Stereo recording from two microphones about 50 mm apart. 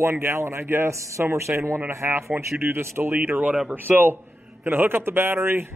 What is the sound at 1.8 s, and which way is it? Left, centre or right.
Speech, right.